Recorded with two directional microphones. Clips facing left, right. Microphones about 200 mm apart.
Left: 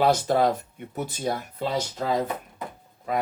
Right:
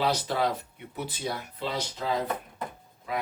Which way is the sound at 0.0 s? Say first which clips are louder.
Left 6 dB; 50° left (ahead or behind).